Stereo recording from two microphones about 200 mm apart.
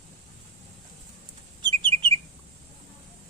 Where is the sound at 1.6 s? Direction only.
25° right (ahead or behind).